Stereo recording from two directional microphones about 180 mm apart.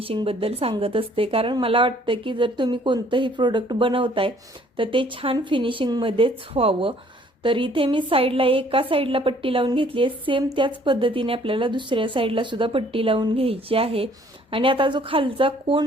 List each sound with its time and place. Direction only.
0.0 s a woman's voice: 30° right (ahead or behind)